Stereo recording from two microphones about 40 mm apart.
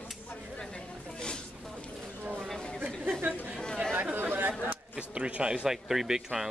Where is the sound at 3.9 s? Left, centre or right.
Right.